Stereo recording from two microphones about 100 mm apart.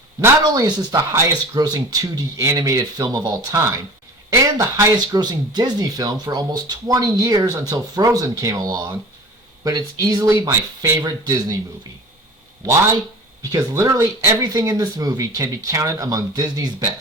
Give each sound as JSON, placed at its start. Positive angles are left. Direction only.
{"t": 0.2, "sound": "speech", "side_deg": -35}
{"t": 5.1, "sound": "speech", "side_deg": -45}
{"t": 13.4, "sound": "speech", "side_deg": -35}